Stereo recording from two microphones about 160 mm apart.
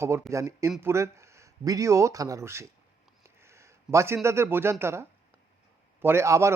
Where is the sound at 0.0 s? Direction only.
15° right (ahead or behind).